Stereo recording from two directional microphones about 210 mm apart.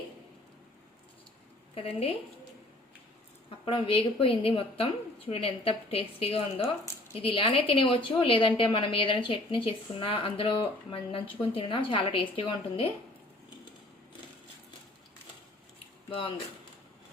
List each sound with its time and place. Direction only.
1.7 s a woman's voice: 30° left (ahead or behind)
3.7 s a woman's voice: 25° left (ahead or behind)
16.0 s speech: 25° left (ahead or behind)